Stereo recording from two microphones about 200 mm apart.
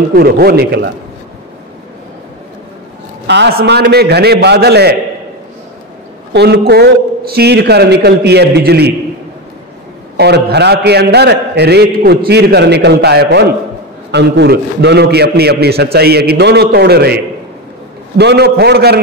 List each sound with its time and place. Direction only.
0.1 s a man's voice: 50° right (ahead or behind)
3.3 s a man's voice: 55° right (ahead or behind)
6.3 s a man's voice: 55° right (ahead or behind)
10.1 s a man's voice: 55° right (ahead or behind)